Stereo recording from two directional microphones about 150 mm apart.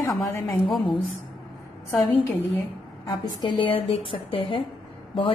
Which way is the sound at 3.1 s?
30° left (ahead or behind).